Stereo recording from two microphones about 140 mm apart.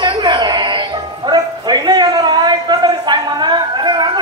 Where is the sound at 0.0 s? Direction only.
35° right (ahead or behind).